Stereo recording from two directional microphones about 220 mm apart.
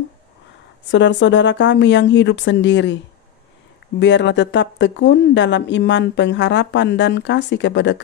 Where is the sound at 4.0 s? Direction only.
55° left (ahead or behind).